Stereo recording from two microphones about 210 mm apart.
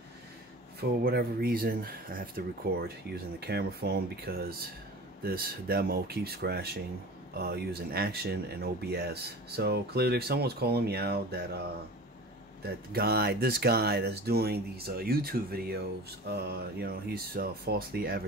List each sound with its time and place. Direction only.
0.7 s speech: 50° right (ahead or behind)
12.6 s speech: 45° right (ahead or behind)